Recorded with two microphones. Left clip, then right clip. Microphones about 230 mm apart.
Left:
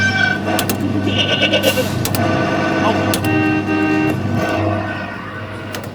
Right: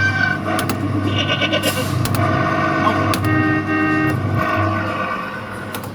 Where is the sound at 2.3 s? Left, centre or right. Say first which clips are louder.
Right 1 dB; centre.